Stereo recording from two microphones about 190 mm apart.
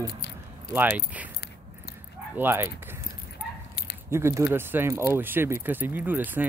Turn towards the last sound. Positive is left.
turn(degrees=-10)  # may be behind; listen again after turning